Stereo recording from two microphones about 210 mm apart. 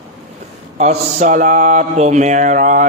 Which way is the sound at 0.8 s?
35° right (ahead or behind).